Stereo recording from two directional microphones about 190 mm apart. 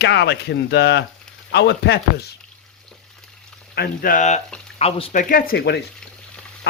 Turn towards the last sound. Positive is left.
turn(degrees=60)  # may be behind; listen again after turning